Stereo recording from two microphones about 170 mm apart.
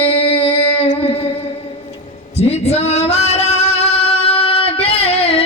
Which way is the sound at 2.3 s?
40° left (ahead or behind).